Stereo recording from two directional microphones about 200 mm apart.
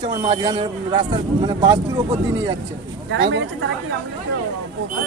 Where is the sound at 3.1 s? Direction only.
65° right (ahead or behind).